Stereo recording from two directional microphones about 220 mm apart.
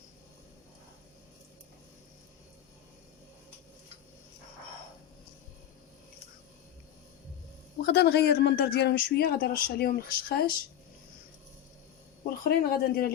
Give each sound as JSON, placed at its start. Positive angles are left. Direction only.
{"t": 7.8, "sound": "speech", "side_deg": 50}
{"t": 12.2, "sound": "speech", "side_deg": 45}